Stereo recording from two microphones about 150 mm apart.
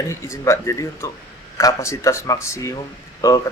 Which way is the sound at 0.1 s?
20° left (ahead or behind).